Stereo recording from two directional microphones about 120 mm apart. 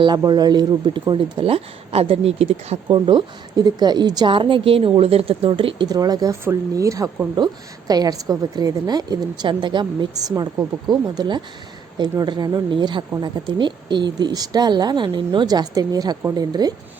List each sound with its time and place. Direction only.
0.2 s speech: 35° right (ahead or behind)
5.9 s a woman's voice: 30° right (ahead or behind)